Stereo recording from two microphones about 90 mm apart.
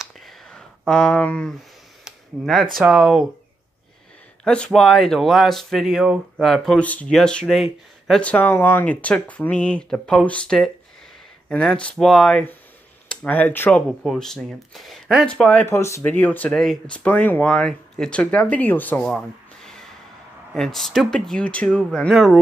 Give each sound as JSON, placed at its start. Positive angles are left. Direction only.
{"t": 0.0, "sound": "a sound", "side_deg": 0}
{"t": 2.0, "sound": "a sound", "side_deg": 0}
{"t": 2.8, "sound": "speech", "side_deg": -5}
{"t": 4.5, "sound": "speech", "side_deg": 5}
{"t": 6.8, "sound": "speech", "side_deg": 15}
{"t": 13.1, "sound": "speech", "side_deg": 15}
{"t": 14.0, "sound": "speech", "side_deg": 5}
{"t": 15.2, "sound": "speech", "side_deg": 15}
{"t": 15.6, "sound": "speech", "side_deg": 30}
{"t": 16.1, "sound": "speech", "side_deg": 20}
{"t": 19.0, "sound": "a sound", "side_deg": 5}
{"t": 20.5, "sound": "speech", "side_deg": 5}
{"t": 22.1, "sound": "speech", "side_deg": 0}